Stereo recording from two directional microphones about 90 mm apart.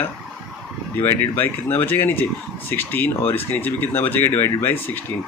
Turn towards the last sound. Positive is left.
turn(degrees=25)  # may be behind; listen again after turning